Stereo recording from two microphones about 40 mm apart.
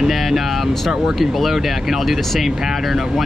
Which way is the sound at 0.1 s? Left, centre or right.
Centre.